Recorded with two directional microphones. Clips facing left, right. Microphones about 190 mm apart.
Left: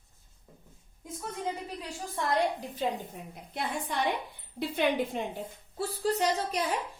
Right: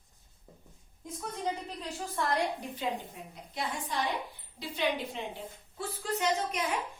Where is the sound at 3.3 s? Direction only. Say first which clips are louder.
Left 2 dB; 55° left (ahead or behind).